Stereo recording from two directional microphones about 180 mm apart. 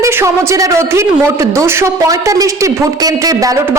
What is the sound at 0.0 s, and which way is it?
Speech, 15° right (ahead or behind).